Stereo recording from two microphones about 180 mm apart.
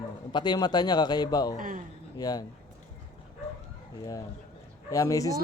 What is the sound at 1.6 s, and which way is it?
Speech, 50° right (ahead or behind).